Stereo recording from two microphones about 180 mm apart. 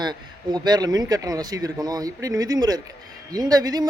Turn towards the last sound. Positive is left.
turn(degrees=-20)  # may be behind; listen again after turning